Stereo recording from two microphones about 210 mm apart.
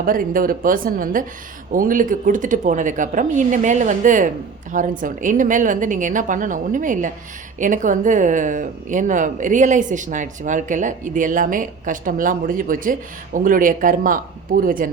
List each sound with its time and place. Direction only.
0.0 s a woman's voice: 40° right (ahead or behind)